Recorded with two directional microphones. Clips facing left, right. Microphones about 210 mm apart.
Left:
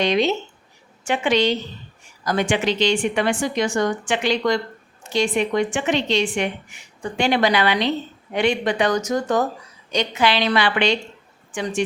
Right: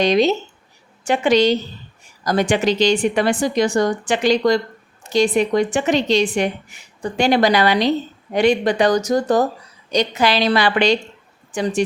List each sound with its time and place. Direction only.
0.0 s speech: 40° right (ahead or behind)